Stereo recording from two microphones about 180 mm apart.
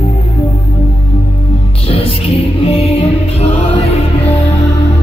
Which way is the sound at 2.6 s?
35° left (ahead or behind).